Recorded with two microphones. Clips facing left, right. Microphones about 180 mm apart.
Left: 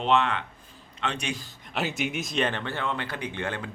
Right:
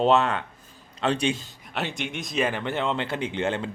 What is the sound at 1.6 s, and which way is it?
Speech, centre (ahead or behind).